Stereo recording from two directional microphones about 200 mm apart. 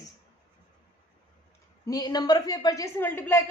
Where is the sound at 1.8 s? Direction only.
20° left (ahead or behind).